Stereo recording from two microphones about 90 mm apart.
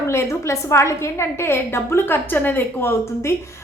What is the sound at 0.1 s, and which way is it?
A woman's voice, 30° left (ahead or behind).